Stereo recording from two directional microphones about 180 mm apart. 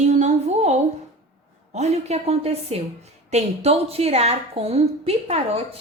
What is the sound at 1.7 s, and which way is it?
A woman's voice, 40° right (ahead or behind).